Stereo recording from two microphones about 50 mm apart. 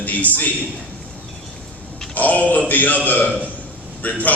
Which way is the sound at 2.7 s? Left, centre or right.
Left.